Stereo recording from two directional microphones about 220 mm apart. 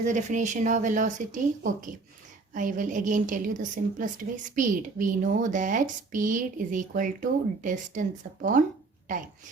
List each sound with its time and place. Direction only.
0.0 s speech: 35° right (ahead or behind)